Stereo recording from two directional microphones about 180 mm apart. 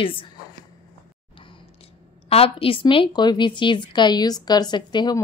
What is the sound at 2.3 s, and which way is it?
A woman's voice, 30° left (ahead or behind).